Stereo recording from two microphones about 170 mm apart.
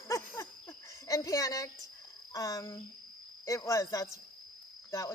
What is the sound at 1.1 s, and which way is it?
Speech, 20° left (ahead or behind).